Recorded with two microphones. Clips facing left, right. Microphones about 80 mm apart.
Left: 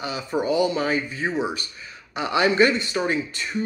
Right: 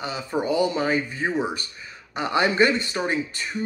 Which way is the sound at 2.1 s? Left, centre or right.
Right.